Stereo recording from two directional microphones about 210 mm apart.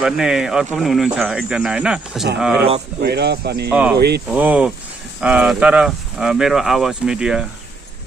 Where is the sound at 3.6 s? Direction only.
5° right (ahead or behind).